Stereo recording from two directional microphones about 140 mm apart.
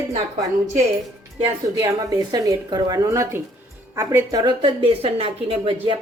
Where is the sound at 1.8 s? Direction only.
30° right (ahead or behind).